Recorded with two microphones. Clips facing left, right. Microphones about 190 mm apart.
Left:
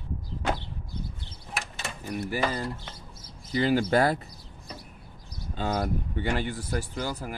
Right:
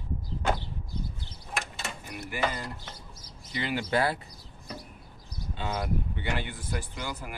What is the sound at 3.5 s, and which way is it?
Speech, 40° left (ahead or behind).